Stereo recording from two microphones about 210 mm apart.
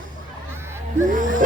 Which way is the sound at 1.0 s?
40° right (ahead or behind).